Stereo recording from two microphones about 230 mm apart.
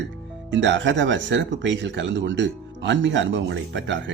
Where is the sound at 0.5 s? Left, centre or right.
Right.